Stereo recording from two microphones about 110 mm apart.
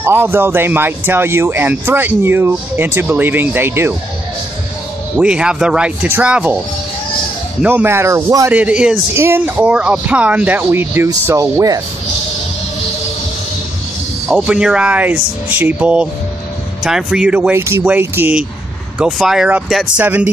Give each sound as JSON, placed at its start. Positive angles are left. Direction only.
{"t": 0.0, "sound": "a man's voice", "side_deg": -20}
{"t": 5.1, "sound": "speech", "side_deg": -10}
{"t": 7.6, "sound": "a man's voice", "side_deg": -20}
{"t": 8.5, "sound": "speech", "side_deg": -10}
{"t": 9.1, "sound": "speech", "side_deg": -20}
{"t": 11.5, "sound": "speech", "side_deg": -30}
{"t": 14.2, "sound": "speech", "side_deg": -10}
{"t": 17.6, "sound": "a man's voice", "side_deg": -25}
{"t": 18.9, "sound": "speech", "side_deg": -5}
{"t": 20.0, "sound": "speech", "side_deg": -15}